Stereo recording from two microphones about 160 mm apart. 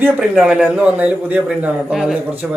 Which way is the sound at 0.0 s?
5° right (ahead or behind).